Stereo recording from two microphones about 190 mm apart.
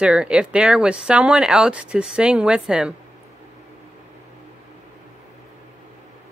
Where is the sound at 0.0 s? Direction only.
5° right (ahead or behind).